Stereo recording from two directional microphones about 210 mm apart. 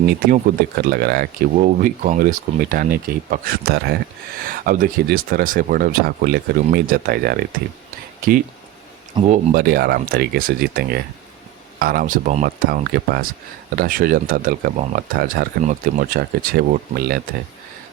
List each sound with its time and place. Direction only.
0.1 s speech: 45° right (ahead or behind)
9.1 s speech: 35° right (ahead or behind)